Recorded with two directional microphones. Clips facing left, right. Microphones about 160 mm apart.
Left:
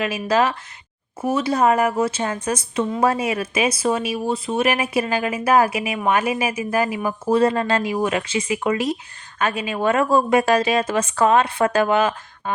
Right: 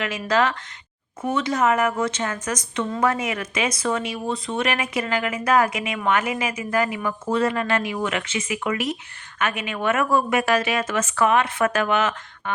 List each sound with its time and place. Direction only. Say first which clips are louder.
0.0 s a woman's voice: left 2 dB; 30° left (ahead or behind)